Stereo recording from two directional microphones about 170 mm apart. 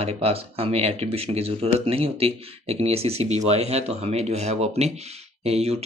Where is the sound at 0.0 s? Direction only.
35° right (ahead or behind).